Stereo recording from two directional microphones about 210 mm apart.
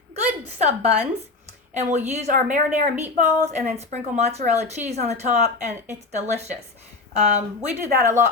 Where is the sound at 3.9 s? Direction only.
30° right (ahead or behind).